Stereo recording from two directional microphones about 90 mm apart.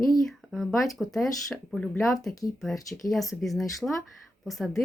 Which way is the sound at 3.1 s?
Centre (ahead or behind).